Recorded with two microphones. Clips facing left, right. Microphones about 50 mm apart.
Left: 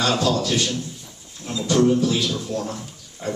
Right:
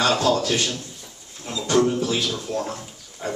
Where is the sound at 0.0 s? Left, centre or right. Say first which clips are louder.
Right 1 dB; right.